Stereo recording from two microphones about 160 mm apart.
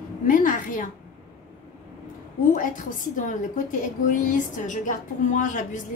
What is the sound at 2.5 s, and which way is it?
A woman's voice, 55° left (ahead or behind).